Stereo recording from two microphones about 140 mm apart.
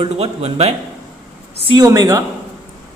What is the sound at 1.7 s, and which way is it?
Speech, 25° right (ahead or behind).